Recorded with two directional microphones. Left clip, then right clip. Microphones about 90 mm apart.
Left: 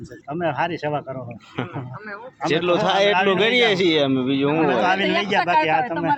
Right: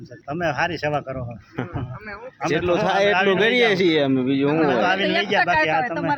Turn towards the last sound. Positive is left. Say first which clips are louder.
# left 1 dB
turn(degrees=-30)  # may be behind; listen again after turning